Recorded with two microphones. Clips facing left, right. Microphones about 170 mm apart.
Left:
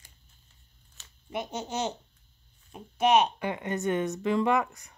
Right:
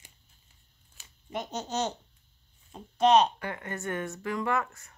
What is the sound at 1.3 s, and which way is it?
Speech, 10° left (ahead or behind).